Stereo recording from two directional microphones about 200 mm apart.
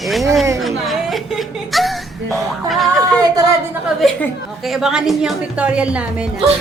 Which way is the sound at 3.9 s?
Centre (ahead or behind).